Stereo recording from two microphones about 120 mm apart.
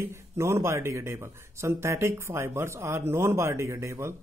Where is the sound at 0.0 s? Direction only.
25° right (ahead or behind).